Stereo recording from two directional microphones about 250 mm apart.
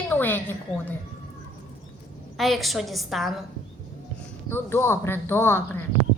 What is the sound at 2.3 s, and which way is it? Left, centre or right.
A woman's voice, centre.